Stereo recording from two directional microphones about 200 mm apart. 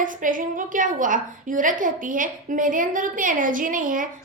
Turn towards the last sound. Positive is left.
turn(degrees=-40)  # may be behind; listen again after turning